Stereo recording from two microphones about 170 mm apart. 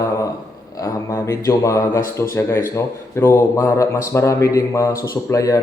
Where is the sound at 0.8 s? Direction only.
20° left (ahead or behind).